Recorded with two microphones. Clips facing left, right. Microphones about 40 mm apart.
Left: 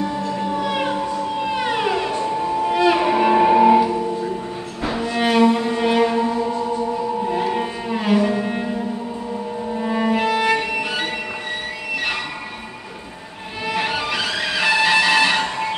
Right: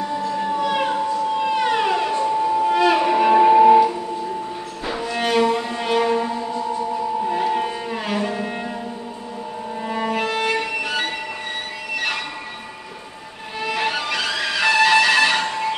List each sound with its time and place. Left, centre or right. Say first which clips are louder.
0.5 s music: right 2 dB; centre
2.1 s music: right 2 dB; centre
2.4 s music: left 1 dB; centre
4.8 s music: left 3 dB; centre
9.8 s music: left 3 dB; centre
13.7 s music: left 1 dB; centre